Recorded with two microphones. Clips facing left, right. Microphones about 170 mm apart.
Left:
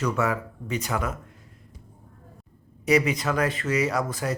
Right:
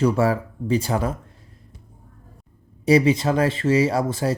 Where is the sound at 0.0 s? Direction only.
30° right (ahead or behind).